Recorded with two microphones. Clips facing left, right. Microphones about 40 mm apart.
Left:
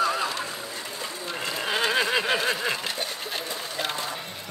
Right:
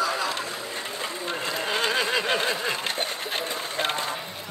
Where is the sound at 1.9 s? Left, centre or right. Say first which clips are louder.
Left 1 dB; centre.